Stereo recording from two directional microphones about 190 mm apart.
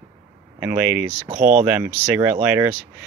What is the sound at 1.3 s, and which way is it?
Speech, 45° right (ahead or behind).